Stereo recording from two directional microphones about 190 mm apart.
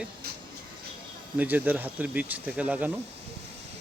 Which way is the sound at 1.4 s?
10° right (ahead or behind).